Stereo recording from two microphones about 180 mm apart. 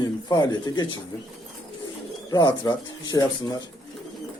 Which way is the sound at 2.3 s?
20° left (ahead or behind).